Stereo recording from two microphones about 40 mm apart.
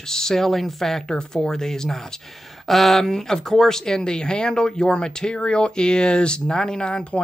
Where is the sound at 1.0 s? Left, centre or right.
Centre.